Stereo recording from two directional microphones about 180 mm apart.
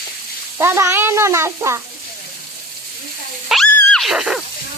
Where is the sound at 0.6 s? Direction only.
15° right (ahead or behind).